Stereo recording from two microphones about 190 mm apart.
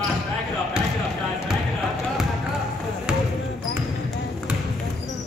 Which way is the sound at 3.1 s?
5° right (ahead or behind).